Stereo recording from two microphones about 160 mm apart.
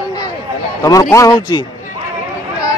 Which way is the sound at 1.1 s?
25° left (ahead or behind).